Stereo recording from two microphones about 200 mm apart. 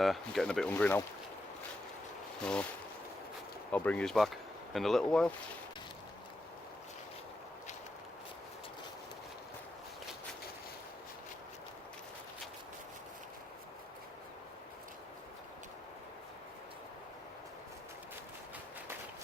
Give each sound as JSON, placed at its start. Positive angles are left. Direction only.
{"t": 0.0, "sound": "speech", "side_deg": 0}
{"t": 2.4, "sound": "speech", "side_deg": 5}
{"t": 3.7, "sound": "speech", "side_deg": 5}